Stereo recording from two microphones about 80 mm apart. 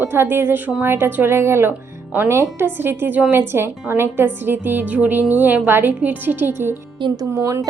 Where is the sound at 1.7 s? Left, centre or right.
Right.